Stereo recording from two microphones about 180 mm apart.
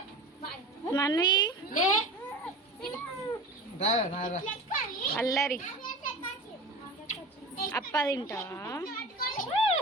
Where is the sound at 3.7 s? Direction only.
40° left (ahead or behind).